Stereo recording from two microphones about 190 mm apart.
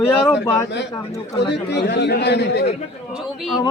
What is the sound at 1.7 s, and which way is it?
Speech, 65° left (ahead or behind).